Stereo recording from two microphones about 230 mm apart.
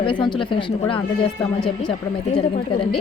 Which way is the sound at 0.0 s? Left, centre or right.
Left.